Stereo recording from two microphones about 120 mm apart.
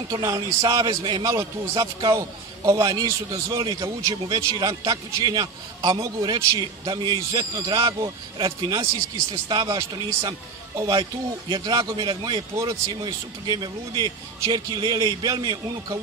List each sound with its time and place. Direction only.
0.1 s a man's voice: 30° right (ahead or behind)
3.6 s speech: 40° right (ahead or behind)